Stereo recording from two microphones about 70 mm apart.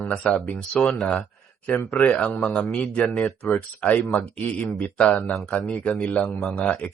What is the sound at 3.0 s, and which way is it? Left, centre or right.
Speech, centre.